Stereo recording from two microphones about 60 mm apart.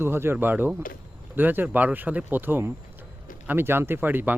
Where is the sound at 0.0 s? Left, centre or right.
Right.